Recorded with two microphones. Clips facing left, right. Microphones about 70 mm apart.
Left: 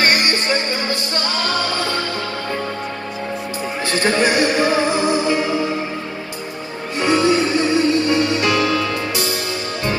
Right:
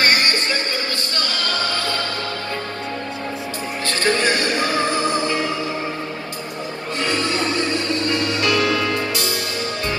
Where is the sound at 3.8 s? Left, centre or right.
Centre.